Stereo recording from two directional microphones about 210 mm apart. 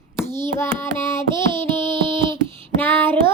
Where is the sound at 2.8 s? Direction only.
10° left (ahead or behind).